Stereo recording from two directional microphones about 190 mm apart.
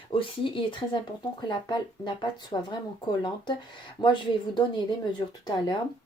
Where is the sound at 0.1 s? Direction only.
25° left (ahead or behind).